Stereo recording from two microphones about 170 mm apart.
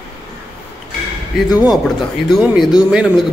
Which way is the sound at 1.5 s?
5° right (ahead or behind).